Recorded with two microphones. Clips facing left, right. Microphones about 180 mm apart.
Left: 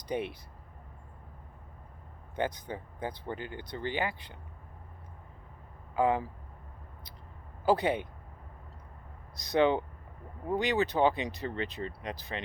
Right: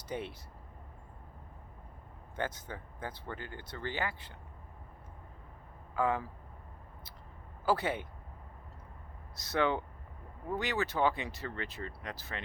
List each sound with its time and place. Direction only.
0.1 s speech: 15° left (ahead or behind)
2.3 s speech: 15° left (ahead or behind)
6.0 s speech: 20° left (ahead or behind)
7.6 s speech: 20° left (ahead or behind)
9.3 s speech: 15° left (ahead or behind)